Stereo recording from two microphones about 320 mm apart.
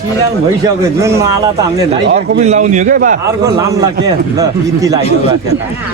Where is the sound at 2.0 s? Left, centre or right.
Right.